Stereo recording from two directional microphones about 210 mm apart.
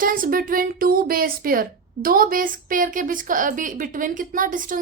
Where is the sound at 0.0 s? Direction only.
40° right (ahead or behind).